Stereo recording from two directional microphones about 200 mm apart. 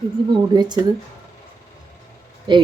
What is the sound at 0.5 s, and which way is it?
Speech, 20° right (ahead or behind).